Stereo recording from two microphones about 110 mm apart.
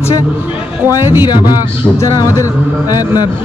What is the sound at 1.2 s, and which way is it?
Speech, 40° left (ahead or behind).